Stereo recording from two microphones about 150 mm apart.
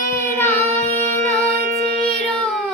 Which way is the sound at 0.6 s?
50° right (ahead or behind).